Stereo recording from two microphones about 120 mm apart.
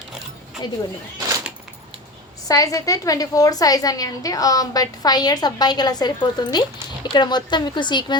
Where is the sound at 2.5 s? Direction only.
30° left (ahead or behind).